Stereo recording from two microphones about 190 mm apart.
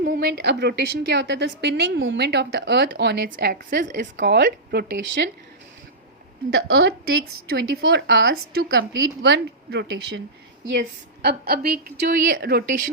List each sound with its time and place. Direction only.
0.0 s a woman's voice: 50° right (ahead or behind)
6.5 s a woman's voice: 60° right (ahead or behind)
11.2 s a woman's voice: 55° right (ahead or behind)